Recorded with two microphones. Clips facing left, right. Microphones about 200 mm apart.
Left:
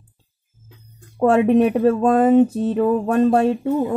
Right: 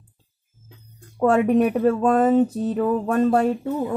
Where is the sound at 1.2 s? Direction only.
25° left (ahead or behind).